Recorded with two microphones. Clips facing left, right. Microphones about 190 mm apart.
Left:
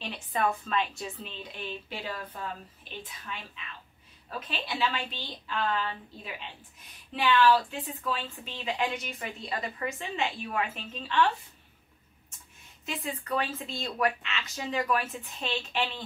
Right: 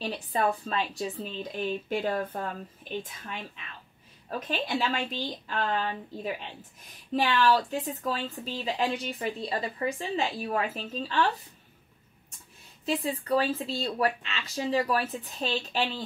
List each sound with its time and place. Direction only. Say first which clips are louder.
0.0 s a woman's voice: right 2 dB; 35° right (ahead or behind)
4.3 s a woman's voice: right 6 dB; 45° right (ahead or behind)
12.8 s a woman's voice: right 7 dB; 30° right (ahead or behind)